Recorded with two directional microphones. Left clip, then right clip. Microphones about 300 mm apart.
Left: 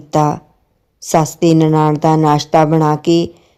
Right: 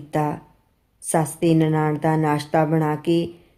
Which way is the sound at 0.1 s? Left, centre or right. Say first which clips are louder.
Left 10 dB; left.